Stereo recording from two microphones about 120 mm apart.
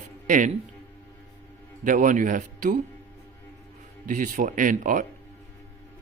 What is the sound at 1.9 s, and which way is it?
Speech, 90° right.